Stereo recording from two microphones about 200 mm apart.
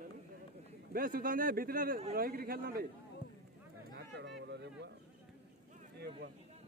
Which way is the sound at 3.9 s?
55° right (ahead or behind).